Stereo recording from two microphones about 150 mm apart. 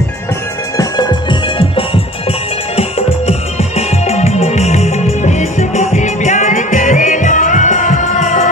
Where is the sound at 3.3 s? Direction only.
45° left (ahead or behind).